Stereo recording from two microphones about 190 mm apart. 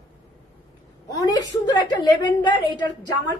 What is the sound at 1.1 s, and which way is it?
A woman's voice, 20° left (ahead or behind).